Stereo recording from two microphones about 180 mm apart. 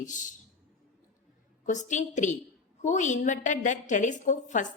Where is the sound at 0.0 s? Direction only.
45° left (ahead or behind).